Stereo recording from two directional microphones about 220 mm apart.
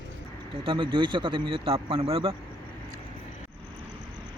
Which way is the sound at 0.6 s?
20° right (ahead or behind).